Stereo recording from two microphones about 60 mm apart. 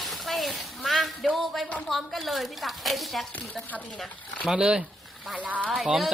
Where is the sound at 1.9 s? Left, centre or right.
Centre.